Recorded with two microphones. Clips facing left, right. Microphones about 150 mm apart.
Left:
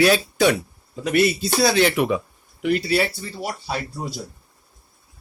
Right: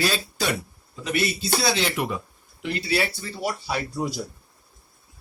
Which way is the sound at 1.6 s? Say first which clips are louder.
Left 9 dB; 55° left (ahead or behind).